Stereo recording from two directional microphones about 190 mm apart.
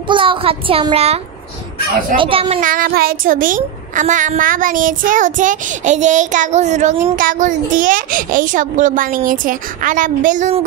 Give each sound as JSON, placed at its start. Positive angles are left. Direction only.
{"t": 0.1, "sound": "a child's voice", "side_deg": -25}
{"t": 2.6, "sound": "a woman's voice", "side_deg": -45}